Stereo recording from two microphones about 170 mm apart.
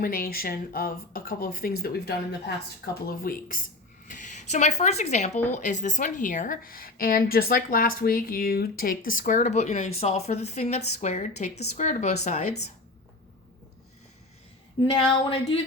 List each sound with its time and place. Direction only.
0.0 s speech: 60° left (ahead or behind)
4.1 s a sound: 45° left (ahead or behind)
4.8 s a woman's voice: 40° left (ahead or behind)
14.8 s speech: 25° left (ahead or behind)